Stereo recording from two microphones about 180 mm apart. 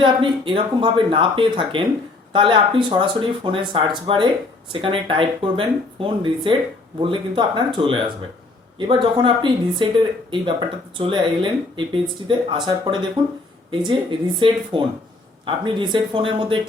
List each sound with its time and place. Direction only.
0.0 s speech: 25° right (ahead or behind)